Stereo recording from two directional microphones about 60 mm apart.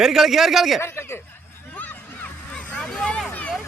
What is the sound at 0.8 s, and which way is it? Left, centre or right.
Speech, left.